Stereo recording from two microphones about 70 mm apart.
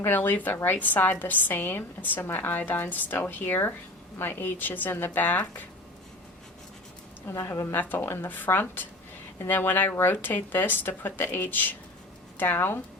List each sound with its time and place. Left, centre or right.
0.0 s a woman's voice: left
7.3 s a woman's voice: left